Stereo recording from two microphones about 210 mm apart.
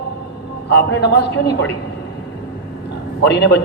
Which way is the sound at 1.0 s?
50° left (ahead or behind).